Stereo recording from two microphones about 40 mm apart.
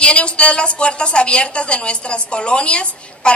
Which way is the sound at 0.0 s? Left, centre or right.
Left.